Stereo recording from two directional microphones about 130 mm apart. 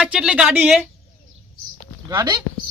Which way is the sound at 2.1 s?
35° right (ahead or behind).